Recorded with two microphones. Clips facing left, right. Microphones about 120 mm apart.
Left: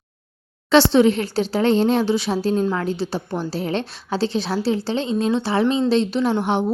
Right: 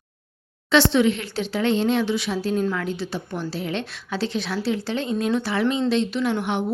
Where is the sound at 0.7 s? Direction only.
35° left (ahead or behind).